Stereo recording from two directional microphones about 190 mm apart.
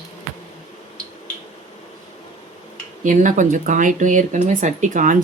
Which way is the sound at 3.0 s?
40° right (ahead or behind).